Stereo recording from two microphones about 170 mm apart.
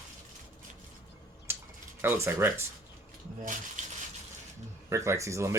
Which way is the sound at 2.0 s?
15° right (ahead or behind).